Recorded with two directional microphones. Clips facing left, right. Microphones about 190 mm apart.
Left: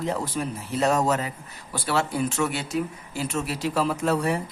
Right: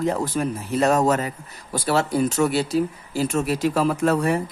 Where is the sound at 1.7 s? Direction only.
40° right (ahead or behind).